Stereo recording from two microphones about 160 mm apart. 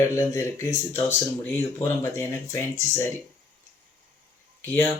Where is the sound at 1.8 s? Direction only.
15° left (ahead or behind).